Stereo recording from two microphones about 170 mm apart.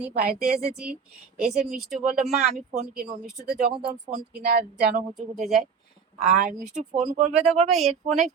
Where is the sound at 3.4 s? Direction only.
65° right (ahead or behind).